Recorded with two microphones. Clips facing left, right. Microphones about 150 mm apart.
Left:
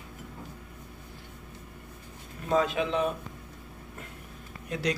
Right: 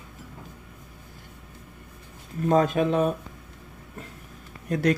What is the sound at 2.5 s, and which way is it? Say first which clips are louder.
Speech: right 5 dB; 45° right (ahead or behind).